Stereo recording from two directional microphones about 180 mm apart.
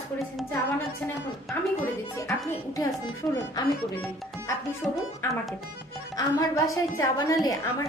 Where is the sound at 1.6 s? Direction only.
10° left (ahead or behind).